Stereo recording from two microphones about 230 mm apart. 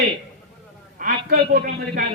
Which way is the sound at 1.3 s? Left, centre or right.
Right.